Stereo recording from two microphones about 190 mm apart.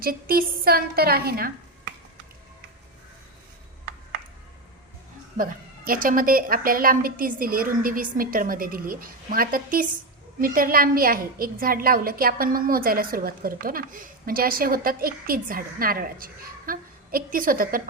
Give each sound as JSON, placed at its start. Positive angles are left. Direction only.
{"t": 0.0, "sound": "a woman's voice", "side_deg": -50}
{"t": 5.4, "sound": "a woman's voice", "side_deg": -45}